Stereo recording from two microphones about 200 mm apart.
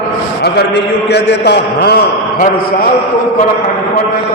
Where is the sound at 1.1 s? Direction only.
55° left (ahead or behind).